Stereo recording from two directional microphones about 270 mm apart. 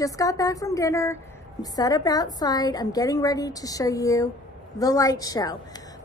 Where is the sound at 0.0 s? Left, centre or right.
Centre.